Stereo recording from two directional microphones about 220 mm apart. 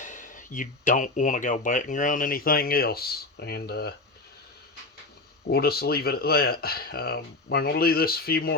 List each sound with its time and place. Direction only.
0.0 s speech: 35° left (ahead or behind)
5.5 s speech: 45° left (ahead or behind)